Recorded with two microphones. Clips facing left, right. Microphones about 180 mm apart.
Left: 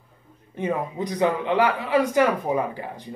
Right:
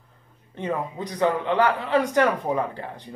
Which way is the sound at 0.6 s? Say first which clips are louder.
Left 2 dB; 10° left (ahead or behind).